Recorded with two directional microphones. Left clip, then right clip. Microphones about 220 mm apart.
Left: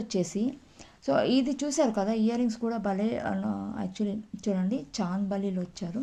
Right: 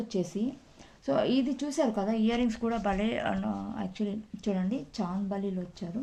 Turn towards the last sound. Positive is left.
turn(degrees=30)  # may be behind; listen again after turning